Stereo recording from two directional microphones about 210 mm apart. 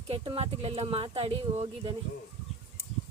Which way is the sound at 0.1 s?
25° right (ahead or behind).